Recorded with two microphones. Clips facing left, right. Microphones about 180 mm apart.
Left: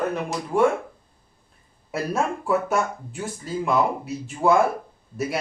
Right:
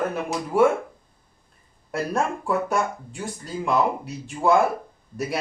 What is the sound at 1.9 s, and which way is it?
Speech, centre (ahead or behind).